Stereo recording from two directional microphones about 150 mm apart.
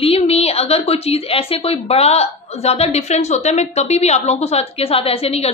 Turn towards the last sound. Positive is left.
turn(degrees=40)  # may be behind; listen again after turning